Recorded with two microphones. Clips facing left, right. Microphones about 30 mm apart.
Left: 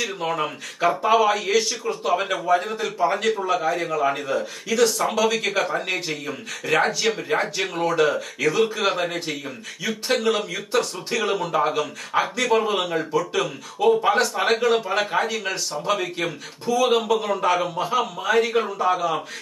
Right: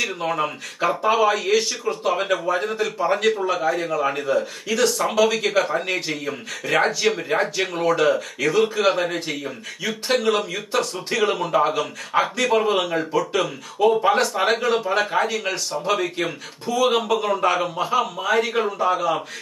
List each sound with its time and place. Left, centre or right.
0.2 s a man's voice: centre